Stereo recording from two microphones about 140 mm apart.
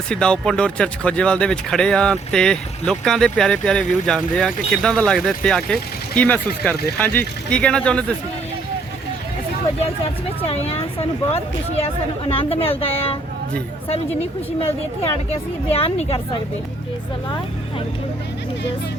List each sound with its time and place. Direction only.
0.1 s speech: 5° left (ahead or behind)
10.4 s speech: 45° left (ahead or behind)
15.7 s speech: 45° left (ahead or behind)